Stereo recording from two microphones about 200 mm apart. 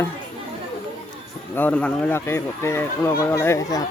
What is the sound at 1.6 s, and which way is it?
Speech, 5° left (ahead or behind).